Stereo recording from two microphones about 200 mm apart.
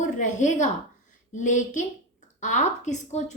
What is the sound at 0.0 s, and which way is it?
A woman's voice, 40° left (ahead or behind).